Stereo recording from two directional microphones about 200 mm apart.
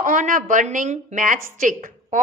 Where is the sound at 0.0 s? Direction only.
40° right (ahead or behind).